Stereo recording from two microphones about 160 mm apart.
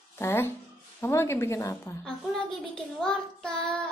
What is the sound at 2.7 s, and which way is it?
Speech, 5° left (ahead or behind).